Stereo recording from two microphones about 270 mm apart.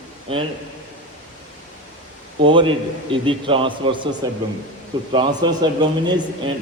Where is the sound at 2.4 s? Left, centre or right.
Centre.